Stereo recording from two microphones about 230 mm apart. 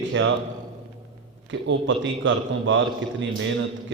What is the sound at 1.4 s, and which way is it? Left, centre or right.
A man's voice, right.